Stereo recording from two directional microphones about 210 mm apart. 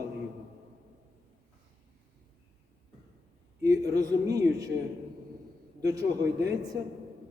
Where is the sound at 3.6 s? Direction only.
15° right (ahead or behind).